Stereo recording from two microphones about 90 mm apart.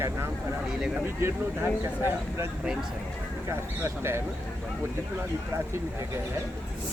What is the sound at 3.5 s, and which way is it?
Speech, 30° right (ahead or behind).